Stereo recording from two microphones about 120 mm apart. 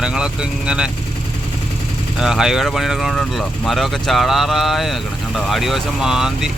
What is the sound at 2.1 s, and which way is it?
Speech, 5° right (ahead or behind).